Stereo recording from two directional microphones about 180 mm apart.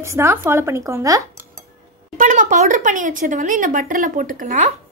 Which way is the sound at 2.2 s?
45° right (ahead or behind).